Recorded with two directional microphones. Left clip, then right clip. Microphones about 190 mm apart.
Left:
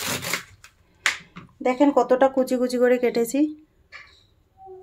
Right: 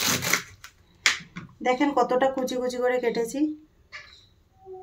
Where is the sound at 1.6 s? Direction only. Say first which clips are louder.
Left 4 dB; 40° left (ahead or behind).